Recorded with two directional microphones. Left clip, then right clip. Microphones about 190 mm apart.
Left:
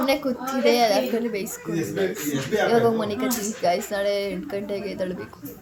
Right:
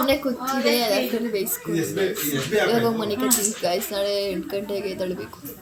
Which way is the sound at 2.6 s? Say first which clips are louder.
Left 2 dB; 5° left (ahead or behind).